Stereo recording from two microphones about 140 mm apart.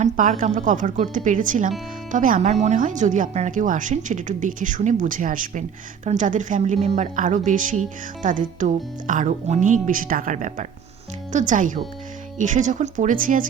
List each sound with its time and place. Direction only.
0.0 s speech: 70° right (ahead or behind)